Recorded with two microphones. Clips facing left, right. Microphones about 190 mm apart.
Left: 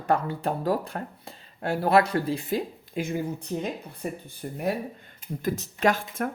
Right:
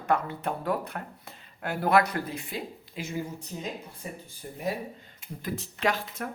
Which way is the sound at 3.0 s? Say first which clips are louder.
Left 8 dB; 50° left (ahead or behind).